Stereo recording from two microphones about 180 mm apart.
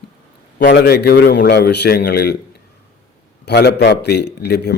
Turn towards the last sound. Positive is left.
turn(degrees=65)  # may be behind; listen again after turning